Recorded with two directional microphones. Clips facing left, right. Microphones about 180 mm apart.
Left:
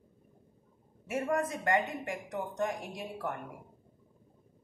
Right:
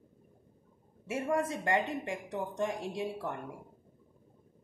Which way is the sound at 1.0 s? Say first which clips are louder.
Even; 30° right (ahead or behind).